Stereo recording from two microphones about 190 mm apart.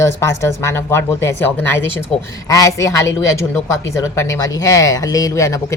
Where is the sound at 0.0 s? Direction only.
15° left (ahead or behind).